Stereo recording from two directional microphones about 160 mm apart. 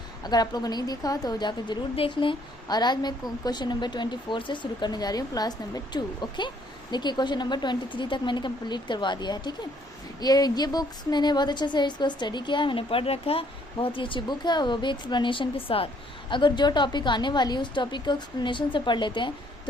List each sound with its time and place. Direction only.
0.2 s a woman's voice: 25° left (ahead or behind)